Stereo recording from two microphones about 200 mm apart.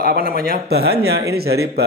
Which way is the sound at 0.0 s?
45° right (ahead or behind).